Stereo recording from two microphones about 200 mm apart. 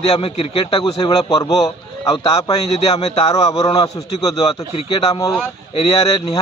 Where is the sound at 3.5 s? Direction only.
20° left (ahead or behind).